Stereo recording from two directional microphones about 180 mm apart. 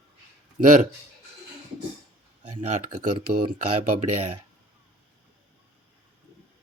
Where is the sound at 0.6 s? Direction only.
45° right (ahead or behind).